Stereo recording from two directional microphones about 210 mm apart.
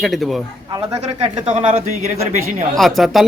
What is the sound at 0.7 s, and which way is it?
Speech, 15° right (ahead or behind).